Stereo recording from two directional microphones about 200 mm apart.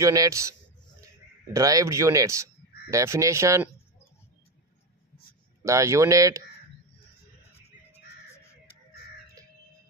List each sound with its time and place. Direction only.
0.0 s speech: 15° right (ahead or behind)
5.6 s speech: 15° right (ahead or behind)